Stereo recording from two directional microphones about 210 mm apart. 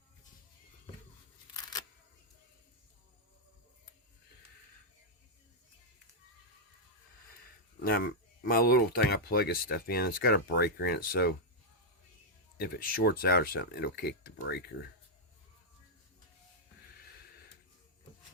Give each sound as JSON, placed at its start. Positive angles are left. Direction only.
{"t": 7.9, "sound": "speech", "side_deg": 45}
{"t": 12.5, "sound": "speech", "side_deg": 45}